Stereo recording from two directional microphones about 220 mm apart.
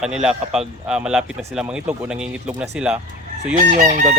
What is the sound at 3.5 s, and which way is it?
Chicken, 40° right (ahead or behind).